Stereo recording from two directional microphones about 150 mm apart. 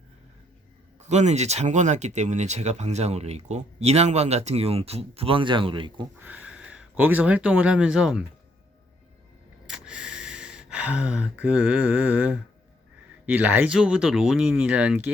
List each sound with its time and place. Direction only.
0.9 s speech: 50° right (ahead or behind); by 6.1 s 35° right (ahead or behind)
6.1 s speech: 10° right (ahead or behind)
9.6 s gasp: 5° right (ahead or behind)
13.2 s speech: 10° right (ahead or behind)